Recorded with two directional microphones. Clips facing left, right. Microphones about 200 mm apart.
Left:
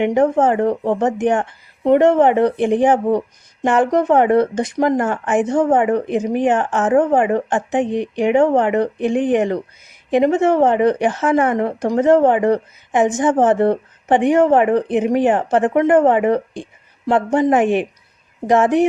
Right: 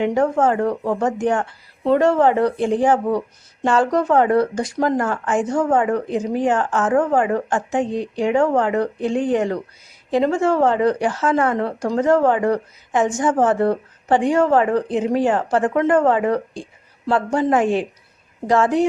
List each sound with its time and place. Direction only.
0.0 s speech: 20° left (ahead or behind)